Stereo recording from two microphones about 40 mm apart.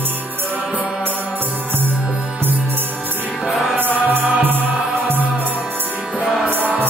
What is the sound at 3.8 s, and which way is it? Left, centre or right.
Music, right.